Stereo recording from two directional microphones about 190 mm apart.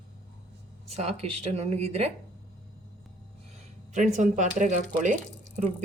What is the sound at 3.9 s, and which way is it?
Speech, 40° right (ahead or behind).